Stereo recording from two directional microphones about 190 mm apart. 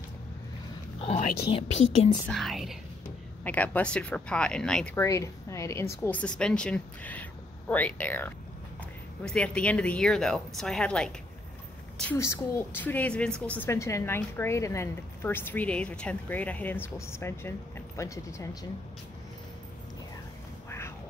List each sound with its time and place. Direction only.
1.0 s whispering: 35° left (ahead or behind)
2.2 s speech: centre (ahead or behind)
4.9 s a woman's voice: 15° left (ahead or behind)